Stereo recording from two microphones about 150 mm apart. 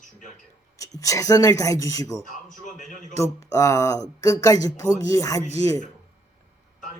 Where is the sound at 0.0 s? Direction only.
55° left (ahead or behind).